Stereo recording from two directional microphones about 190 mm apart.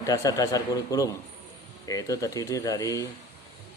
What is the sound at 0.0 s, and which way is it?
A man's voice, 20° left (ahead or behind).